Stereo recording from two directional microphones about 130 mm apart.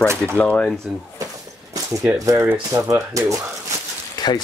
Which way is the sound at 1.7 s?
25° right (ahead or behind).